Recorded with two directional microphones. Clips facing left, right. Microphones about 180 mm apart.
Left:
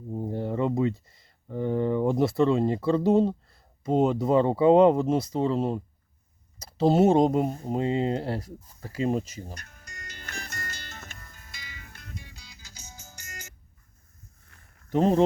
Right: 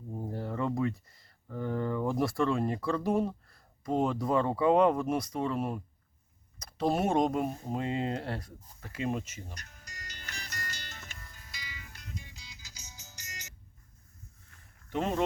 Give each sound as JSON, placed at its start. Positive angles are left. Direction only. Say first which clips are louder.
{"t": 0.1, "sound": "speech", "louder": "left 7 dB", "side_deg": 20}
{"t": 9.6, "sound": "music", "louder": "left 3 dB", "side_deg": 55}
{"t": 14.8, "sound": "speech", "louder": "left 9 dB", "side_deg": 40}